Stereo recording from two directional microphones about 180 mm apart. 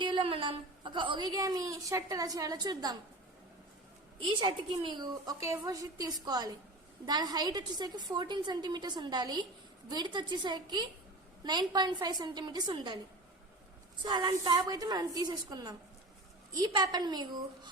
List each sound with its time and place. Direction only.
0.0 s a woman's voice: 30° right (ahead or behind)
4.3 s a woman's voice: 25° right (ahead or behind)
14.0 s a woman's voice: 25° right (ahead or behind)